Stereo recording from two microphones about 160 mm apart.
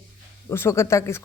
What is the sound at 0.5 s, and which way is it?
Speech, 15° left (ahead or behind).